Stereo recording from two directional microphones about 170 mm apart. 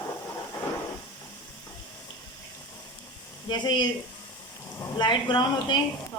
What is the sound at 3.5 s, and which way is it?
A woman's voice, 25° left (ahead or behind).